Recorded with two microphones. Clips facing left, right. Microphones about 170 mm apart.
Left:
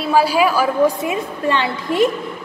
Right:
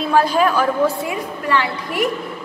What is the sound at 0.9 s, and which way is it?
A woman's voice, 20° left (ahead or behind).